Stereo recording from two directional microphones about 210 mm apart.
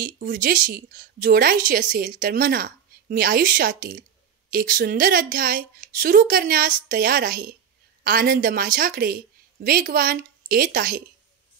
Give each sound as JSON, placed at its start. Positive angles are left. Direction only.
{"t": 0.0, "sound": "a woman's voice", "side_deg": -40}